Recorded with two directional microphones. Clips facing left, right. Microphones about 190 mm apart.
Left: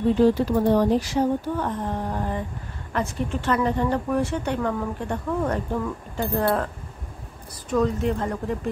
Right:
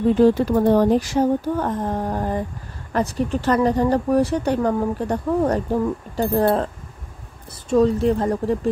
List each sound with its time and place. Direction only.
0.2 s speech: 45° right (ahead or behind); by 6.7 s 30° right (ahead or behind)
7.7 s speech: 35° right (ahead or behind)